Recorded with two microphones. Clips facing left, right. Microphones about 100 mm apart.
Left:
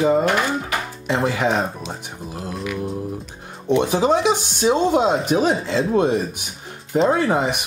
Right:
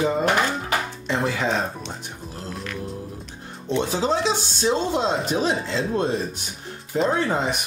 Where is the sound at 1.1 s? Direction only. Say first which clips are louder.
Left 4 dB; 5° left (ahead or behind).